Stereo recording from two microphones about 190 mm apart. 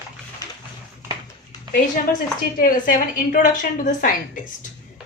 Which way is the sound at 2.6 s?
45° left (ahead or behind).